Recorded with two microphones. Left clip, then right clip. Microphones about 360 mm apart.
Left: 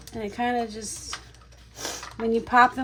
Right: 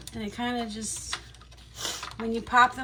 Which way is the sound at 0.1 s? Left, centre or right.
Centre.